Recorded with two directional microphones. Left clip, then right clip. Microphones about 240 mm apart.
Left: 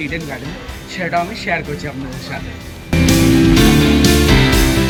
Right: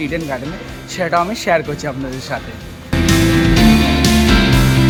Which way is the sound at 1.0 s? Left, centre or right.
Centre.